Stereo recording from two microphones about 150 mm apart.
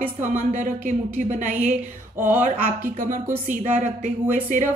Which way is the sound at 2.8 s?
65° right (ahead or behind).